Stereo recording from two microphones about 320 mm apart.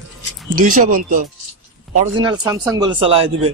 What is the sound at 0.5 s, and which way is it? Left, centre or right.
Speech, right.